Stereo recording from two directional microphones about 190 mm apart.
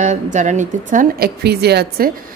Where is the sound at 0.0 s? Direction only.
40° right (ahead or behind); by 2.0 s 55° right (ahead or behind).